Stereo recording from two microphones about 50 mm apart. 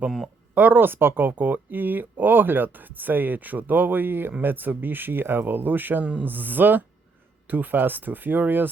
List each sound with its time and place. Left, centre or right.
0.5 s speech: right